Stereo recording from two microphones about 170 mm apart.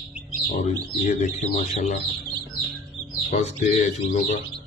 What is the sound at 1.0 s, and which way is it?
Speech, 45° left (ahead or behind).